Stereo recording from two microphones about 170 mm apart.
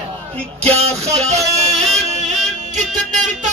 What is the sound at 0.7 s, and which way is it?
Music, 35° right (ahead or behind).